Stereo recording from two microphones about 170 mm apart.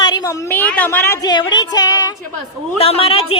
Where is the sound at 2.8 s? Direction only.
35° left (ahead or behind).